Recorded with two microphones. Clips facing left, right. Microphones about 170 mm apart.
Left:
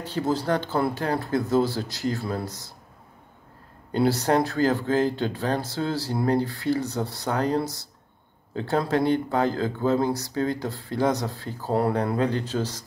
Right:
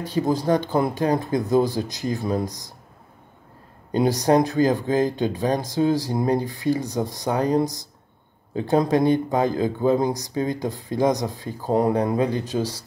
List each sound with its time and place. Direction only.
0.0 s speech: 15° right (ahead or behind)
3.9 s speech: 15° right (ahead or behind)